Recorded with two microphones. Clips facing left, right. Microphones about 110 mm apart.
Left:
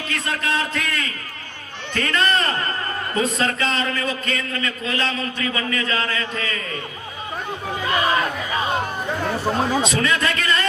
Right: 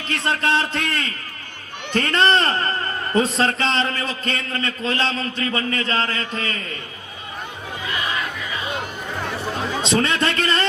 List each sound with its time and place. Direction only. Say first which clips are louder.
0.1 s a sound: right 4 dB; 30° right (ahead or behind)
3.2 s a man's voice: right 3 dB; 30° right (ahead or behind)
7.9 s music: left 6 dB; 45° left (ahead or behind)
9.8 s a man's voice: right 1 dB; 30° right (ahead or behind)